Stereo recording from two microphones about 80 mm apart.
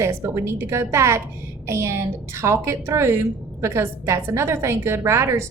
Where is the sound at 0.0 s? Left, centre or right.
Right.